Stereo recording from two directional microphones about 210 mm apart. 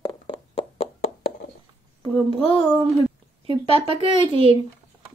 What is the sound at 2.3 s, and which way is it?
Speech, 25° left (ahead or behind).